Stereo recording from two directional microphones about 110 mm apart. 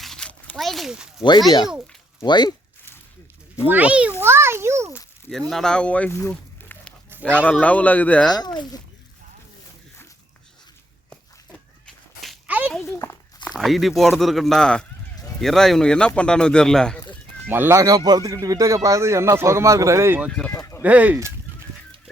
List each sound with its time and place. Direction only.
0.0 s a sound: 5° left (ahead or behind)
0.5 s speech: centre (ahead or behind)
1.5 s speech: 40° left (ahead or behind)
3.7 s a child's voice: 10° right (ahead or behind)
5.5 s speech: 5° left (ahead or behind)
6.1 s speech: 20° left (ahead or behind)
6.3 s a sound: 10° left (ahead or behind)
7.1 s speech: 15° right (ahead or behind)
7.4 s speech: 10° left (ahead or behind)
12.5 s a sound: 15° right (ahead or behind)
13.4 s speech: 5° left (ahead or behind)
17.5 s speech: 20° right (ahead or behind)
20.5 s a sound: 25° left (ahead or behind)
20.8 s a child's voice: 15° right (ahead or behind)